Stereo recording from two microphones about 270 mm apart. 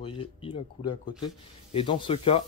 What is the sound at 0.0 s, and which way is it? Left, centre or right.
Speech, left.